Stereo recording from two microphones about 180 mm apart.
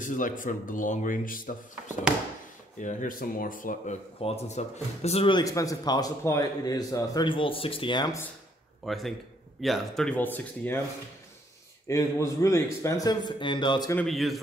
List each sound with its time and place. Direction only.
0.0 s speech: 45° left (ahead or behind)
2.8 s speech: 45° left (ahead or behind)
4.2 s speech: 35° left (ahead or behind)
5.4 s a man's voice: 20° left (ahead or behind)
8.8 s a man's voice: centre (ahead or behind)
11.9 s a man's voice: 20° left (ahead or behind)
13.9 s a man's voice: centre (ahead or behind)